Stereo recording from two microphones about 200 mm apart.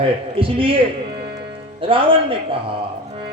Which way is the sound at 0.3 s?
25° right (ahead or behind).